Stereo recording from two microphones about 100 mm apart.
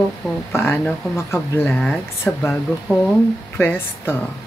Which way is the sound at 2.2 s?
25° left (ahead or behind).